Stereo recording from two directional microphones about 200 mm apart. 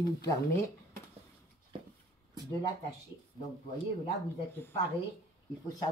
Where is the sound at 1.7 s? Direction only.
25° right (ahead or behind).